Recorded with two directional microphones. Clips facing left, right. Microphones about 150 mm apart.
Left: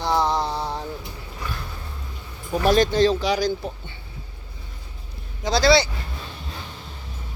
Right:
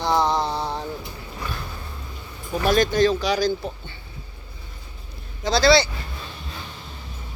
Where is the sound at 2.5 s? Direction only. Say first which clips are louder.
Left 1 dB; 35° left (ahead or behind); by 3.7 s 15° left (ahead or behind).